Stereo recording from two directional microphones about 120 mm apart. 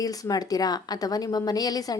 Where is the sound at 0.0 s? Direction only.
30° left (ahead or behind).